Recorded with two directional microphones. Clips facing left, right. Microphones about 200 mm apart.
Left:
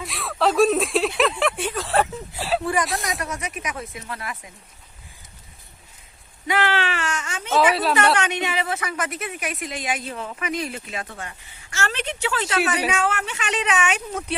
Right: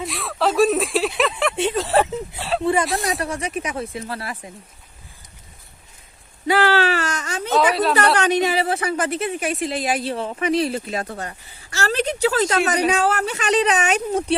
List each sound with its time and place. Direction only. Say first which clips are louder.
0.0 s a sound: right 1 dB; centre (ahead or behind)
1.5 s a sound: right 5 dB; 25° right (ahead or behind)
3.0 s speech: right 5 dB; 35° right (ahead or behind)
6.5 s speech: right 5 dB; 35° right (ahead or behind)
7.5 s speech: right 1 dB; centre (ahead or behind)
8.1 s speech: right 5 dB; 35° right (ahead or behind)